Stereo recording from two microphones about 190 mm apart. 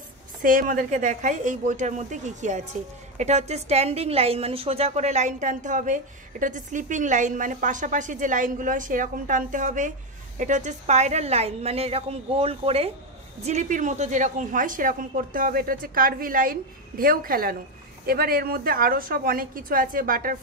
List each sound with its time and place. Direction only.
0.4 s a woman's voice: 45° right (ahead or behind)